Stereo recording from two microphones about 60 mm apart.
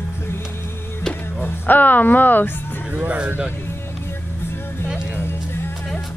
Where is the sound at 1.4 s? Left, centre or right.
Left.